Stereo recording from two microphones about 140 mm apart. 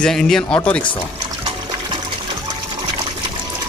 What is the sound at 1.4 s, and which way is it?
Water, 35° right (ahead or behind).